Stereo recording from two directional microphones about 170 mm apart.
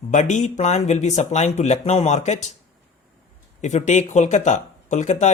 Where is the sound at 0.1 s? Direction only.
45° left (ahead or behind).